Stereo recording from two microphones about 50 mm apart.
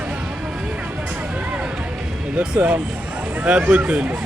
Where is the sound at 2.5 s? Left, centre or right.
Right.